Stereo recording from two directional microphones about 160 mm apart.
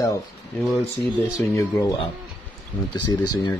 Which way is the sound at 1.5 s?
20° left (ahead or behind).